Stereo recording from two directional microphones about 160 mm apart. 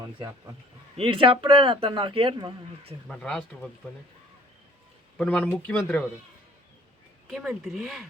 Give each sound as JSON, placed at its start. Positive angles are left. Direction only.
{"t": 0.0, "sound": "speech", "side_deg": -20}
{"t": 0.9, "sound": "speech", "side_deg": -35}
{"t": 3.1, "sound": "speech", "side_deg": 5}
{"t": 5.1, "sound": "speech", "side_deg": 10}
{"t": 7.3, "sound": "speech", "side_deg": 0}